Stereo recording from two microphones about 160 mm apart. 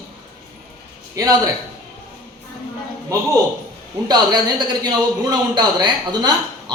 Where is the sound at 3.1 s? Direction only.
20° right (ahead or behind).